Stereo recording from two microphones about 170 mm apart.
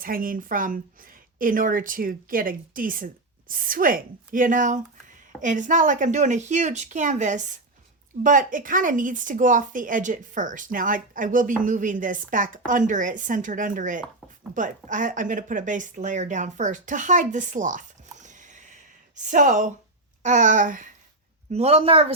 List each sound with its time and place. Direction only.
0.0 s speech: 55° right (ahead or behind)
21.5 s a woman's voice: 40° right (ahead or behind)